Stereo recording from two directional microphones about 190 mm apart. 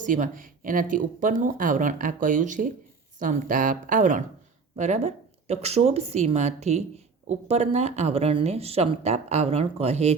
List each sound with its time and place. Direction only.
0.0 s speech: 45° right (ahead or behind)